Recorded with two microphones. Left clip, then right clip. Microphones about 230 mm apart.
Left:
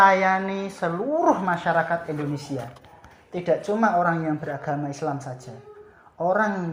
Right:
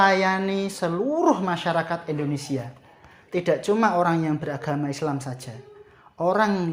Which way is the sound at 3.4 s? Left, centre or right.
Right.